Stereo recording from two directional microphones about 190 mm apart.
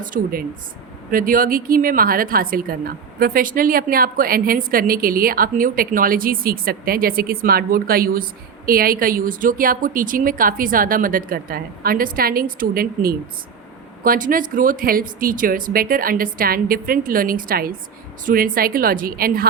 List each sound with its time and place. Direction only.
0.0 s a woman's voice: 50° right (ahead or behind)